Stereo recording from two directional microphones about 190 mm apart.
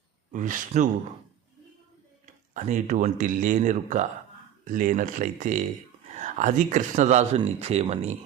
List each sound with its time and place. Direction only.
0.3 s speech: 45° right (ahead or behind)
2.2 s speech: 40° right (ahead or behind)